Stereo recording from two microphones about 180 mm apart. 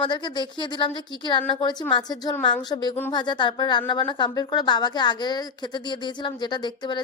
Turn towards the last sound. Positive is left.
turn(degrees=25)  # may be behind; listen again after turning